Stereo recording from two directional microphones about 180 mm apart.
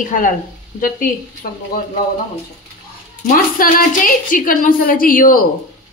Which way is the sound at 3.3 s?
50° left (ahead or behind).